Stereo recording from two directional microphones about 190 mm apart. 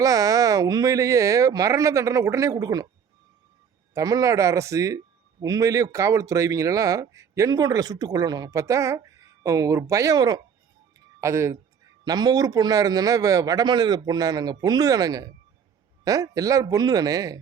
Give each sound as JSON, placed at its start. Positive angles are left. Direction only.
{"t": 0.0, "sound": "a man's voice", "side_deg": -20}
{"t": 3.9, "sound": "a man's voice", "side_deg": -20}